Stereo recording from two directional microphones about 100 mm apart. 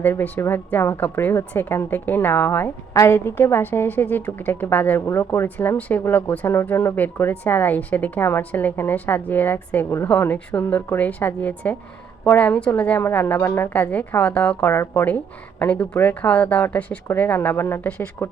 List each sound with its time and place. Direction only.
0.0 s a woman's voice: 20° left (ahead or behind)
5.5 s a woman's voice: 15° left (ahead or behind)